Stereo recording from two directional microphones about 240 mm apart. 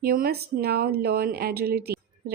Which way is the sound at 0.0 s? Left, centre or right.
Right.